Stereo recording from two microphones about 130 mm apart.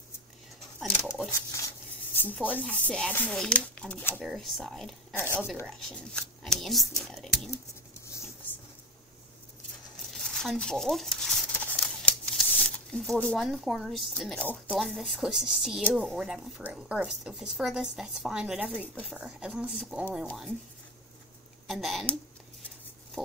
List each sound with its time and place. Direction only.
1.0 s a sound: centre (ahead or behind)
1.3 s speech: 25° left (ahead or behind)
2.5 s speech: 10° left (ahead or behind)
5.1 s speech: 15° left (ahead or behind)
5.7 s speech: 5° left (ahead or behind)
10.0 s crumpling: 5° left (ahead or behind)
14.4 s speech: 10° left (ahead or behind)
14.8 s speech: centre (ahead or behind)
21.6 s speech: centre (ahead or behind)
23.2 s pig: 5° left (ahead or behind)